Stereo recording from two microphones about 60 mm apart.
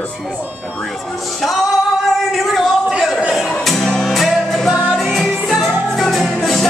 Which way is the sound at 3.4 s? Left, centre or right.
Centre.